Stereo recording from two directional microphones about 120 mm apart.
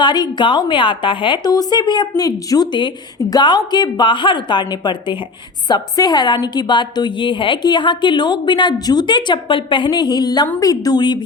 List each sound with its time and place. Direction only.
0.0 s a woman's voice: 40° left (ahead or behind)